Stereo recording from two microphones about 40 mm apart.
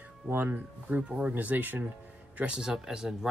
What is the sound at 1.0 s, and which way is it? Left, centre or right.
Speech, right.